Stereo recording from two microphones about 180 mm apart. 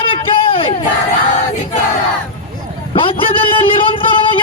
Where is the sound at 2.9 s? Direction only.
30° left (ahead or behind).